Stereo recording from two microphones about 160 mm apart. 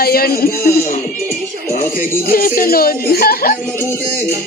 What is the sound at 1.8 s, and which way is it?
Speech, 60° left (ahead or behind).